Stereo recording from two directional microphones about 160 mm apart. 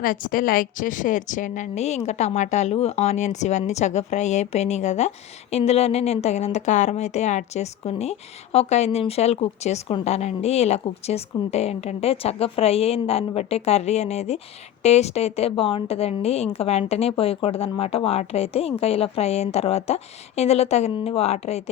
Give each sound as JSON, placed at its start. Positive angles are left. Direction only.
{"t": 0.0, "sound": "a woman's voice", "side_deg": 60}